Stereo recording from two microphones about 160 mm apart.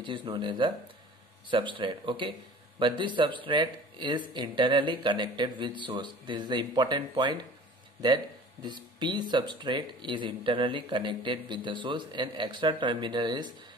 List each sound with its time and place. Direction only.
0.0 s speech: 35° right (ahead or behind)